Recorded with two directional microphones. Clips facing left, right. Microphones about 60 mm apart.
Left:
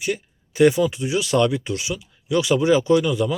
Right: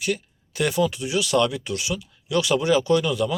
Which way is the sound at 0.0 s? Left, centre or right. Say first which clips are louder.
Left 1 dB; centre.